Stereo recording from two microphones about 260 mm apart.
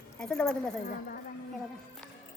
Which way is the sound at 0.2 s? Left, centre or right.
Centre.